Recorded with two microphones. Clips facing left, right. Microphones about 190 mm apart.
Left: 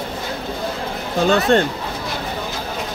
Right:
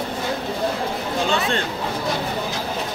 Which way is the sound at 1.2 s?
45° left (ahead or behind).